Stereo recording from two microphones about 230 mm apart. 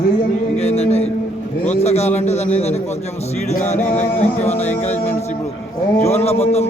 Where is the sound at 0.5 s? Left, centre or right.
Left.